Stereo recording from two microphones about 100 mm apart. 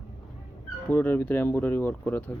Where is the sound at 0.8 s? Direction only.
20° left (ahead or behind).